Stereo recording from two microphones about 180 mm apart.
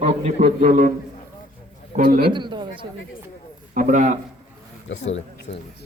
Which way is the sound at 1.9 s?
50° right (ahead or behind).